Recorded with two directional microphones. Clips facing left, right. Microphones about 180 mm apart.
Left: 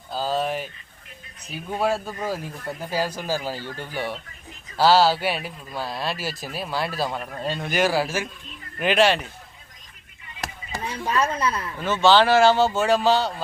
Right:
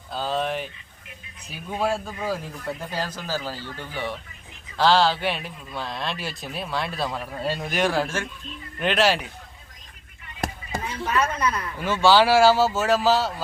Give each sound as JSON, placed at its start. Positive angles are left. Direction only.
{"t": 0.1, "sound": "speech", "side_deg": 5}
{"t": 10.8, "sound": "a woman's voice", "side_deg": 30}
{"t": 11.8, "sound": "speech", "side_deg": -10}